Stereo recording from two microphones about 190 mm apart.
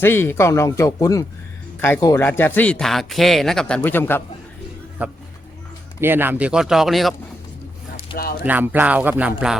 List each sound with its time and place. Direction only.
0.0 s speech: 10° left (ahead or behind)
5.0 s speech: 10° right (ahead or behind)
8.1 s speech: 50° left (ahead or behind)
8.4 s speech: 10° right (ahead or behind)